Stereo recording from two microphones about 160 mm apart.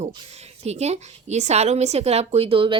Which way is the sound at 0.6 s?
40° right (ahead or behind).